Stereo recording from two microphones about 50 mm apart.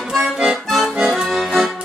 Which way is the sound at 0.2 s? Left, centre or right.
Centre.